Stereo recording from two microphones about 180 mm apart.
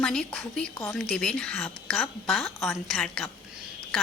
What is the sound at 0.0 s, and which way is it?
Speech, 5° left (ahead or behind).